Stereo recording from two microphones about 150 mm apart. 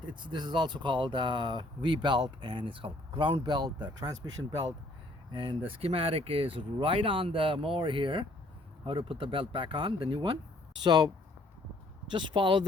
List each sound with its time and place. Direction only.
0.3 s speech: 30° right (ahead or behind)
5.3 s speech: 30° right (ahead or behind)
12.1 s speech: 30° right (ahead or behind)